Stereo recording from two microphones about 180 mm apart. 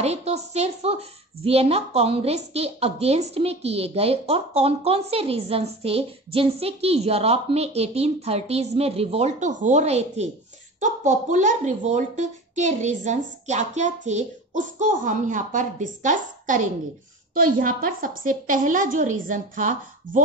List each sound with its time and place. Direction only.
0.0 s a woman's voice: 35° right (ahead or behind)